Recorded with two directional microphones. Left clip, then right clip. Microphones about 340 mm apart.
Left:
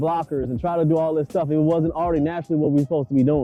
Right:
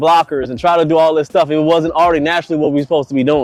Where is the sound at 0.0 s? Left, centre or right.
Centre.